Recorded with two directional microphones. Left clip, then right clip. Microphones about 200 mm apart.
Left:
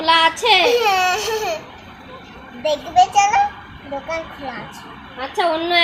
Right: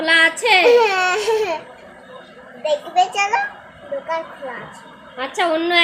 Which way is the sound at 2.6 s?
15° right (ahead or behind).